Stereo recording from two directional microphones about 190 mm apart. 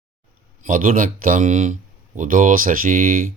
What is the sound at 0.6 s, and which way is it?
Speech, 45° right (ahead or behind).